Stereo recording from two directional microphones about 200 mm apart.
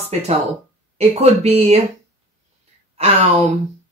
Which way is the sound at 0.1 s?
35° right (ahead or behind).